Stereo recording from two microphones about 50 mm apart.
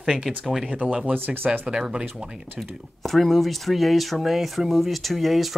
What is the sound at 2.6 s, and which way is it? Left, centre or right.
Speech, centre.